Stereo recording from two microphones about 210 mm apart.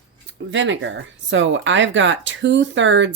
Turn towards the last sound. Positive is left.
turn(degrees=-60)  # may be behind; listen again after turning